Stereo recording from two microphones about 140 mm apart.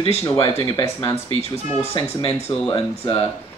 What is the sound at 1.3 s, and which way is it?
Speech, 45° right (ahead or behind).